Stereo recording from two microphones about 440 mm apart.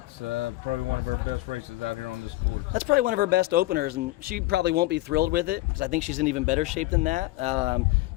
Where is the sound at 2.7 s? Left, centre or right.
Centre.